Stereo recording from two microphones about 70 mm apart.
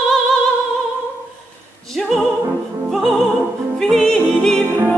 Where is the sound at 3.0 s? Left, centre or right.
Centre.